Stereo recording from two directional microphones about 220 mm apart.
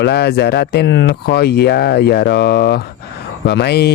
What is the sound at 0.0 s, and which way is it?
Speech, 45° left (ahead or behind).